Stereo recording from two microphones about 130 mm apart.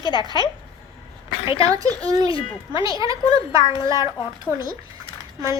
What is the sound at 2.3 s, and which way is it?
Speech, 40° left (ahead or behind).